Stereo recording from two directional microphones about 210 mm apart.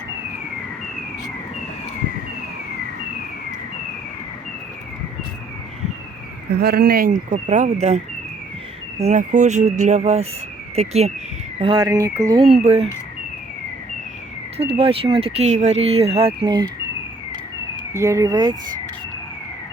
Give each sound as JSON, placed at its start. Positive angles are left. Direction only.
{"t": 6.5, "sound": "speech", "side_deg": -50}
{"t": 9.0, "sound": "speech", "side_deg": -35}
{"t": 12.6, "sound": "speech", "side_deg": -30}
{"t": 14.6, "sound": "speech", "side_deg": -30}
{"t": 17.9, "sound": "speech", "side_deg": -15}